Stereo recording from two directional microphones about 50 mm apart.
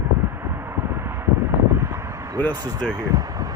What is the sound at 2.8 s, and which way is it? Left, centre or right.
Speech, left.